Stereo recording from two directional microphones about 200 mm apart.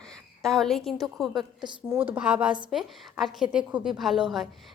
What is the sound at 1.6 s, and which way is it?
A woman's voice, 15° right (ahead or behind).